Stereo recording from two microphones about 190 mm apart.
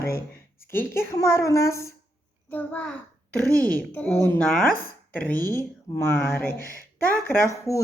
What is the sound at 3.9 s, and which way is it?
A woman's voice, 10° left (ahead or behind).